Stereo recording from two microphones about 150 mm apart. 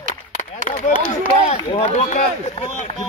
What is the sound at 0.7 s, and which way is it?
Chop, 55° left (ahead or behind).